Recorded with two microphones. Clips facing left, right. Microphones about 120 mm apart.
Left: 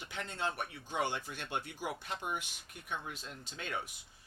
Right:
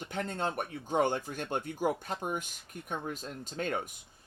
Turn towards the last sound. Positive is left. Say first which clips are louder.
# right 7 dB
turn(degrees=-45)  # may be behind; listen again after turning